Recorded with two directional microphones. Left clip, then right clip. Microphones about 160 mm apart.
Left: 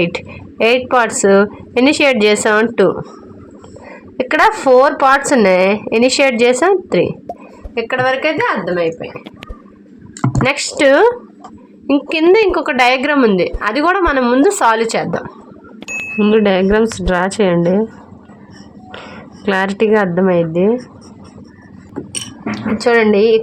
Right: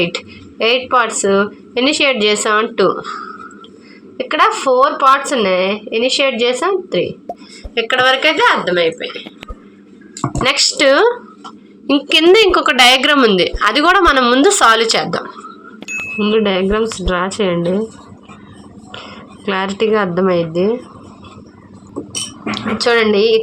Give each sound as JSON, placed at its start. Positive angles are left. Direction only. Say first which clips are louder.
{"t": 0.6, "sound": "speech", "louder": "left 1 dB", "side_deg": 15}
{"t": 4.2, "sound": "a woman's voice", "louder": "left 1 dB", "side_deg": 20}
{"t": 7.3, "sound": "a sound", "louder": "even", "side_deg": 0}
{"t": 7.8, "sound": "a woman's voice", "louder": "right 3 dB", "side_deg": 0}
{"t": 10.6, "sound": "speech", "louder": "left 1 dB", "side_deg": 15}
{"t": 11.9, "sound": "a woman's voice", "louder": "right 1 dB", "side_deg": 0}
{"t": 19.5, "sound": "a woman's voice", "louder": "left 2 dB", "side_deg": 5}
{"t": 22.5, "sound": "speech", "louder": "left 1 dB", "side_deg": 15}